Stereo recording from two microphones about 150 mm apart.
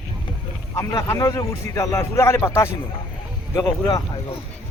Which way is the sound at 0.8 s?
20° left (ahead or behind).